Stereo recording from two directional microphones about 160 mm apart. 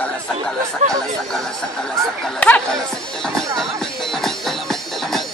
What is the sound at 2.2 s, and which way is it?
Speech, 10° left (ahead or behind).